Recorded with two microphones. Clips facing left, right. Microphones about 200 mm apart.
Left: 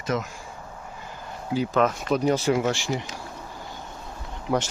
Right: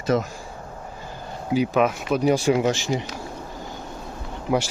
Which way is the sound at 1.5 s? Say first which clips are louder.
Right 2 dB; 10° right (ahead or behind).